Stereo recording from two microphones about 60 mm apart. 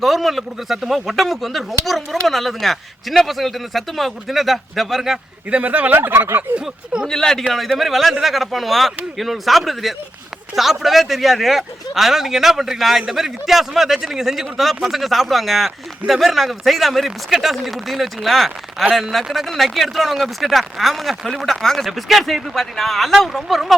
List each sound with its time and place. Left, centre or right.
0.0 s speech: centre
5.5 s speech: right
6.0 s speech: right
7.1 s a man's voice: centre